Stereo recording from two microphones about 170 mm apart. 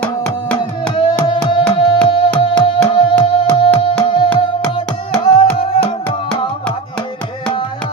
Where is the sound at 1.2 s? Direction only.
30° left (ahead or behind).